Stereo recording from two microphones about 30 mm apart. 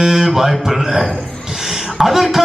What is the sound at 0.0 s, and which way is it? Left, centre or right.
A man's voice, centre.